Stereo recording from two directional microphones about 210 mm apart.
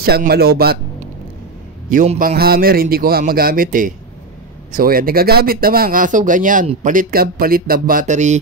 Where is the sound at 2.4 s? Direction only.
45° right (ahead or behind).